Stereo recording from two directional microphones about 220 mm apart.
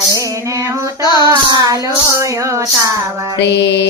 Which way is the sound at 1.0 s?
20° left (ahead or behind).